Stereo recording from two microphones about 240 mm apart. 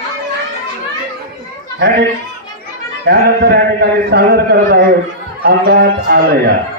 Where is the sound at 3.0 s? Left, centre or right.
Right.